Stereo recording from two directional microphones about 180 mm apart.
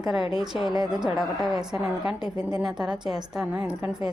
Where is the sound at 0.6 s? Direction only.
20° right (ahead or behind).